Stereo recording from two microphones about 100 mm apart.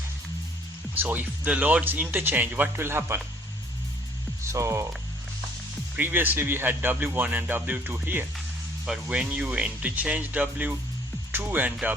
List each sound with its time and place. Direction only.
0.9 s speech: 15° right (ahead or behind)
4.5 s speech: 30° right (ahead or behind)
6.0 s speech: 20° right (ahead or behind)